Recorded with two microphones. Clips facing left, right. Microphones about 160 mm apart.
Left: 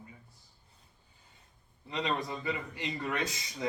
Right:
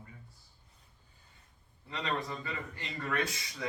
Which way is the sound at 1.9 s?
15° left (ahead or behind).